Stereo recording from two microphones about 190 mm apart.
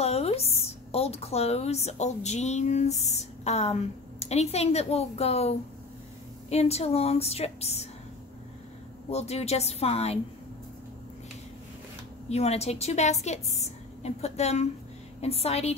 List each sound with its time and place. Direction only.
0.0 s a woman's voice: 35° left (ahead or behind)
9.1 s a woman's voice: 35° left (ahead or behind)
12.3 s a woman's voice: 35° left (ahead or behind)